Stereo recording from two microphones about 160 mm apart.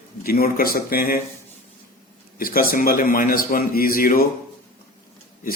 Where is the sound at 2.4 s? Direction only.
65° left (ahead or behind).